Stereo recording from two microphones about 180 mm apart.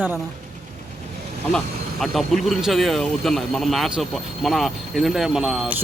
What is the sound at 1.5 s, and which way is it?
Speech, centre (ahead or behind).